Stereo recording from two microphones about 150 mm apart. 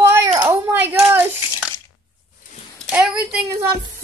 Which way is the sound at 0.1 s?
25° right (ahead or behind).